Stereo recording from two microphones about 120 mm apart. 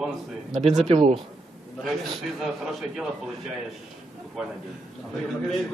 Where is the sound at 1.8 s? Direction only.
Centre (ahead or behind).